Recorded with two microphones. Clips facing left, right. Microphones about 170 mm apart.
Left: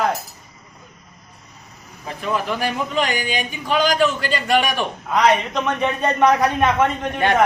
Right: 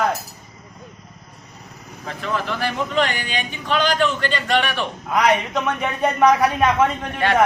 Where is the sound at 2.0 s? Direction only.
15° left (ahead or behind).